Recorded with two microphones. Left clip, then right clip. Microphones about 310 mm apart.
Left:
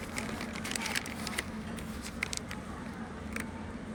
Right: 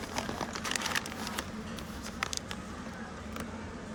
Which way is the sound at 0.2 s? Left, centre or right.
Right.